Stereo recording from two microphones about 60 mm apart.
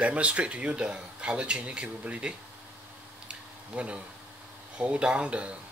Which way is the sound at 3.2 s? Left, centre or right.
Centre.